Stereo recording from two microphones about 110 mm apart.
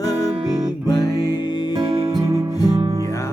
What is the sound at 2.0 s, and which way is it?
Music, 30° right (ahead or behind).